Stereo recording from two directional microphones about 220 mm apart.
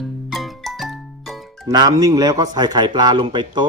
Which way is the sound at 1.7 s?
15° right (ahead or behind).